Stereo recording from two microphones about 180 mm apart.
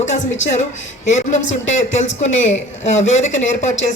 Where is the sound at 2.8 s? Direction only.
40° left (ahead or behind).